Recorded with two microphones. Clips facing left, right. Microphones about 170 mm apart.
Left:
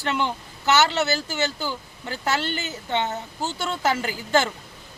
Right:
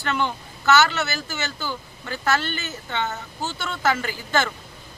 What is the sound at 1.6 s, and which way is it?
A man's voice, 15° left (ahead or behind).